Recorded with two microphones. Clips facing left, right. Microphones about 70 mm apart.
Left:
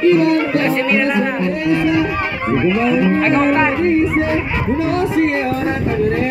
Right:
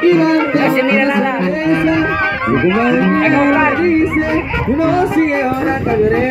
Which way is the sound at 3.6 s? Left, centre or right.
Centre.